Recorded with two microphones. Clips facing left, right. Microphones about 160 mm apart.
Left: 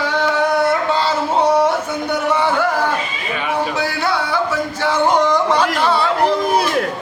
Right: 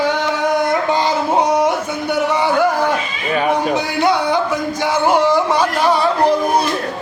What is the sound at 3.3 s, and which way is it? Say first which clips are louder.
Music: right 5 dB; 45° right (ahead or behind).